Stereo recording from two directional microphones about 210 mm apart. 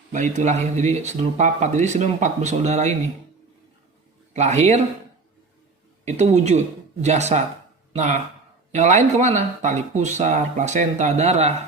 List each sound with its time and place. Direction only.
0.1 s speech: 35° right (ahead or behind)
4.4 s speech: 30° right (ahead or behind)
6.1 s speech: 30° right (ahead or behind)